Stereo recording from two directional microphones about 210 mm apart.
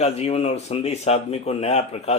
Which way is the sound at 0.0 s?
30° left (ahead or behind).